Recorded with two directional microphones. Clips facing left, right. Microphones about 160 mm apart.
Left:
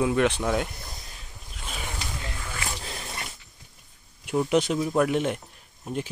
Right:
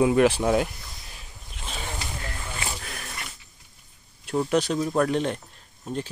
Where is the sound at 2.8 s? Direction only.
25° left (ahead or behind).